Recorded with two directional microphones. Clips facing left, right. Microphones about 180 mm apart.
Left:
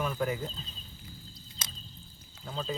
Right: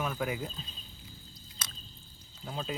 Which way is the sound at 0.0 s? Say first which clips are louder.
Left 2 dB; 5° right (ahead or behind).